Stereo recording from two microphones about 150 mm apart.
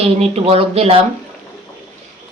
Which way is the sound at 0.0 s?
40° right (ahead or behind).